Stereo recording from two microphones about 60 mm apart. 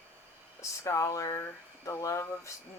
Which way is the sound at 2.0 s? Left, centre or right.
Left.